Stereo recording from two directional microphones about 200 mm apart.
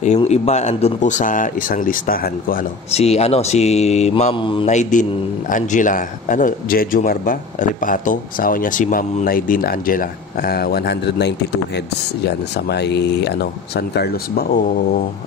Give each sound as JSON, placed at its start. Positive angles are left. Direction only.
{"t": 0.0, "sound": "speech", "side_deg": 35}
{"t": 2.9, "sound": "speech", "side_deg": 30}